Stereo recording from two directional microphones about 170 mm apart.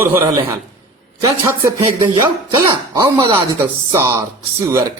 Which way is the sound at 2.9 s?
25° right (ahead or behind).